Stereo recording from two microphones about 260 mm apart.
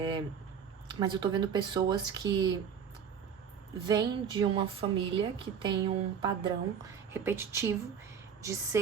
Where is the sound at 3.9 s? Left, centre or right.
Centre.